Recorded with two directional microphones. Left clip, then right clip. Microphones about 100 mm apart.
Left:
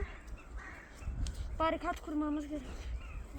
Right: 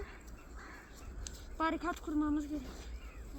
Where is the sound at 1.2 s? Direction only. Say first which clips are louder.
Left 2 dB; 5° left (ahead or behind).